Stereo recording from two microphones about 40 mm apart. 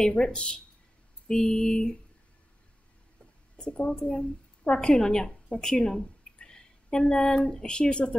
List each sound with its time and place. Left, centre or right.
0.2 s speech: left
3.5 s a woman's voice: left
5.5 s a sound: centre
7.4 s speech: centre